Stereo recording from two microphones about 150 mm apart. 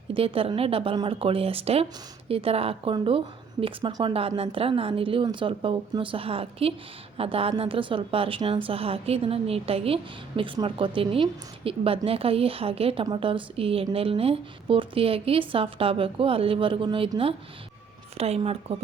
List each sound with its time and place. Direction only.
0.1 s a woman's voice: 35° right (ahead or behind)
18.2 s a woman's voice: 40° right (ahead or behind)